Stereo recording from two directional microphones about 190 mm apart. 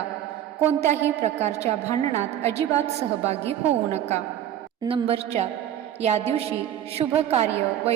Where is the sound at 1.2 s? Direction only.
35° right (ahead or behind).